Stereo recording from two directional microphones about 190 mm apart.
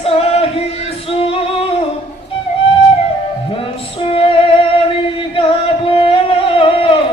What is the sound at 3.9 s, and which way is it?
Female singing, 30° left (ahead or behind).